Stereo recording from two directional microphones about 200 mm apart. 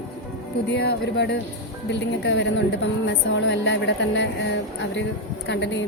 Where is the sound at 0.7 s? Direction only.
55° left (ahead or behind).